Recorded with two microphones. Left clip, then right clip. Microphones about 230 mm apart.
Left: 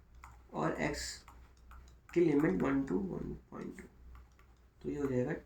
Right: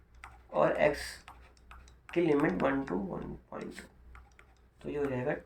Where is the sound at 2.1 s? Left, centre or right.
Centre.